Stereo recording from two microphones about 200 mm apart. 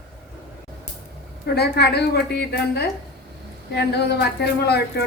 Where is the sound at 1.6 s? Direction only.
55° left (ahead or behind).